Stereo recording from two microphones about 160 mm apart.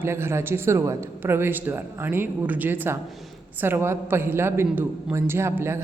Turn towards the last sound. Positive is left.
turn(degrees=-15)  # may be behind; listen again after turning